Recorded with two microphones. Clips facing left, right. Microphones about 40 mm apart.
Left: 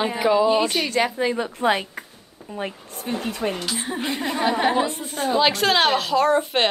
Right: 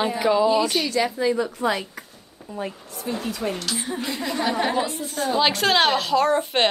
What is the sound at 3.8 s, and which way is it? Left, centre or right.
A woman's voice, left.